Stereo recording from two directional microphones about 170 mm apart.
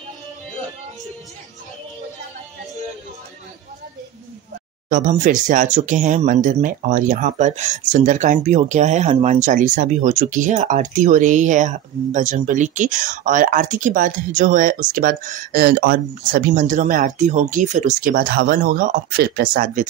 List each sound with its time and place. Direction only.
4.8 s speech: 50° right (ahead or behind)